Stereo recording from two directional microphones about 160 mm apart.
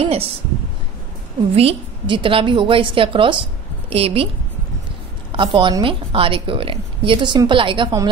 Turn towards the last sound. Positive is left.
turn(degrees=-30)  # may be behind; listen again after turning